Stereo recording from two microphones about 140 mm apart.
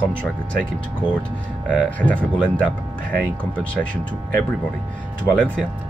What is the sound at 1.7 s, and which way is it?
Speech, 10° left (ahead or behind).